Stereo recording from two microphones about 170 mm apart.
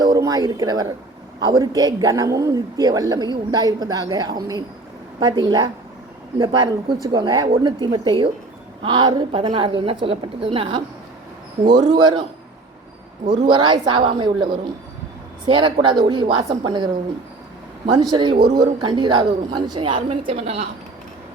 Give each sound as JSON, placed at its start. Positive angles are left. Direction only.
{"t": 0.0, "sound": "a woman's voice", "side_deg": -20}
{"t": 13.5, "sound": "a woman's voice", "side_deg": -30}
{"t": 18.1, "sound": "a woman's voice", "side_deg": -25}